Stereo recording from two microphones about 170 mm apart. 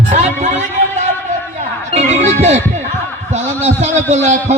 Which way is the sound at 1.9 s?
45° right (ahead or behind).